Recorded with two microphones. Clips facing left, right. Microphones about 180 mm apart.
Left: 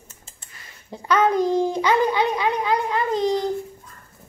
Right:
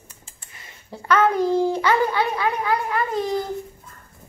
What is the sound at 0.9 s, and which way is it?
A child's voice, 15° left (ahead or behind).